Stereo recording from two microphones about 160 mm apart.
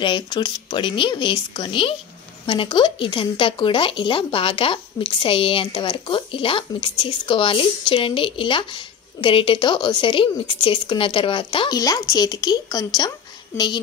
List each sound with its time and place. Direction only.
0.0 s speech: 30° left (ahead or behind)